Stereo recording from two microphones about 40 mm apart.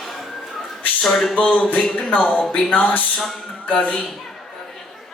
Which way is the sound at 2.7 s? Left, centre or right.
Left.